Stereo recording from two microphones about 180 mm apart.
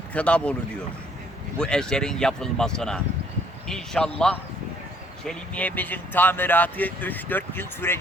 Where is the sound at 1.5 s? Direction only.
5° left (ahead or behind).